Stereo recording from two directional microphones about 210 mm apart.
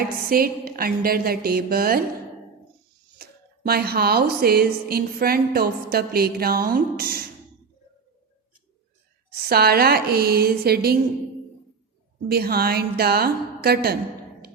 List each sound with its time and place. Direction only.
0.3 s speech: 45° right (ahead or behind)
3.2 s speech: 50° right (ahead or behind)
9.3 s speech: 50° right (ahead or behind)
12.3 s speech: 45° right (ahead or behind)